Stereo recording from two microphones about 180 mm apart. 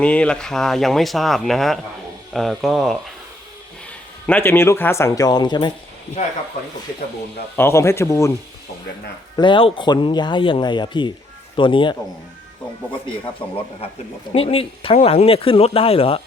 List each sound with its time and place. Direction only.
0.0 s speech: 5° left (ahead or behind)
4.3 s speech: 10° left (ahead or behind)
6.2 s speech: 35° left (ahead or behind)
7.5 s speech: 15° left (ahead or behind)
9.3 s speech: 25° left (ahead or behind)
13.4 s speech: 30° left (ahead or behind)